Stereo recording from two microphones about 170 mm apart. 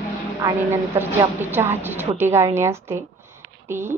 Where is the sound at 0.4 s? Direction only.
20° right (ahead or behind).